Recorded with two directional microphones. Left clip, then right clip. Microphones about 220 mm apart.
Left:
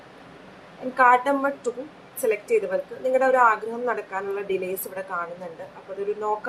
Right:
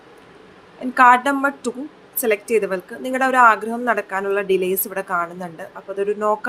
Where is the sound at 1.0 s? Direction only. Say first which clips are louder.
Right 5 dB; 35° right (ahead or behind).